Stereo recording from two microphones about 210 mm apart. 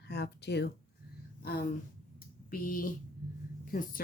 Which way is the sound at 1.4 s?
50° left (ahead or behind).